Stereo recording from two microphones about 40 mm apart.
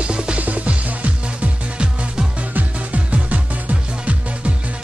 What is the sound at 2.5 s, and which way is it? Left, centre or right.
Music, right.